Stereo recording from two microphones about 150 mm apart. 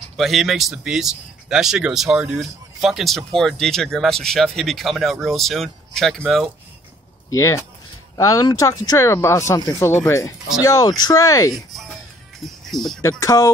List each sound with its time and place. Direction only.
0.2 s speech: centre (ahead or behind)
7.2 s speech: 20° left (ahead or behind)
12.4 s speech: centre (ahead or behind)
13.2 s speech: 20° left (ahead or behind)